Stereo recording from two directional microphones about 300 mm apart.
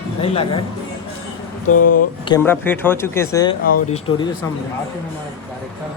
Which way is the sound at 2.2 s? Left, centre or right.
Centre.